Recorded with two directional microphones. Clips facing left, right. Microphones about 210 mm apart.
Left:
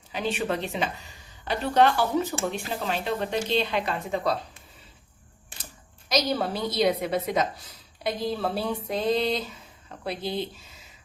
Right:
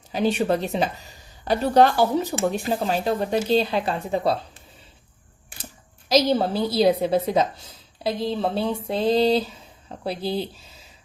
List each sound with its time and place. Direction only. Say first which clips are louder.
0.1 s a woman's voice: right 7 dB; 40° right (ahead or behind)
6.1 s a woman's voice: right 6 dB; 30° right (ahead or behind)